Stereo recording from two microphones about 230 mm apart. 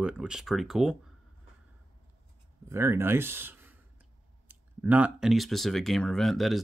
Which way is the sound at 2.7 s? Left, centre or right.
Centre.